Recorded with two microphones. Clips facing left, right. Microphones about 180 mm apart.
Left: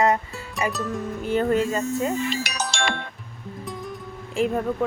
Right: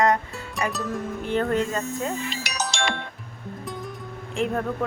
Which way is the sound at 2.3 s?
55° left (ahead or behind).